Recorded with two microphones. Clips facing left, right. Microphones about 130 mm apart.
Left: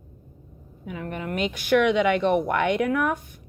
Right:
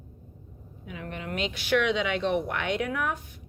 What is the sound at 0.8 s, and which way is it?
A woman's voice, 45° left (ahead or behind).